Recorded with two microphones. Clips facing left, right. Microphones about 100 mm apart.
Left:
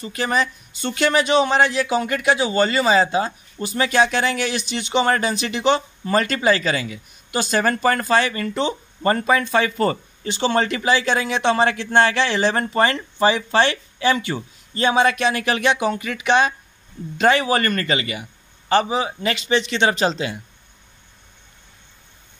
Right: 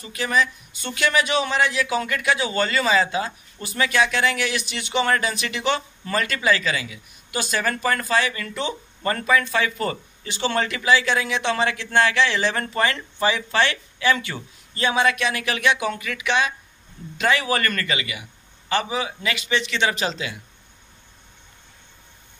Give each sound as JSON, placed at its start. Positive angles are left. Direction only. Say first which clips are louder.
{"t": 0.0, "sound": "speech", "louder": "left 1 dB", "side_deg": 40}